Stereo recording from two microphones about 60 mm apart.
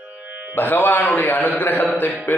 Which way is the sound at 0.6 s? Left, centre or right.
Left.